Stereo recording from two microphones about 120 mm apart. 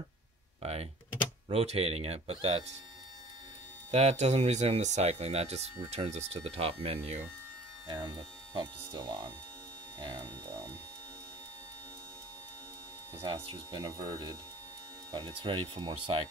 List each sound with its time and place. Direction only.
0.6 s speech: 60° right (ahead or behind)
3.9 s speech: 60° right (ahead or behind)
7.9 s speech: 40° right (ahead or behind)
13.2 s speech: 45° right (ahead or behind)